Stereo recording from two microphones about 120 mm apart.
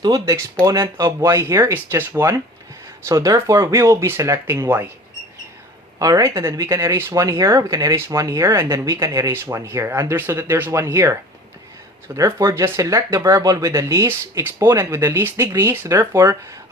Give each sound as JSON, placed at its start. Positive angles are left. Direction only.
{"t": 0.0, "sound": "speech", "side_deg": -30}
{"t": 6.0, "sound": "speech", "side_deg": -30}